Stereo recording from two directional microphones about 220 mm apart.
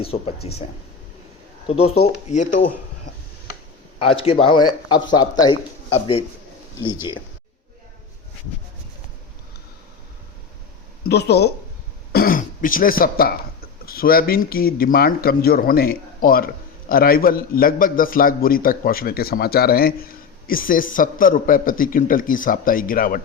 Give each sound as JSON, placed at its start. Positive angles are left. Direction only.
{"t": 0.0, "sound": "speech", "side_deg": 25}
{"t": 1.6, "sound": "a man's voice", "side_deg": 25}
{"t": 4.0, "sound": "speech", "side_deg": 25}
{"t": 11.1, "sound": "a man's voice", "side_deg": 50}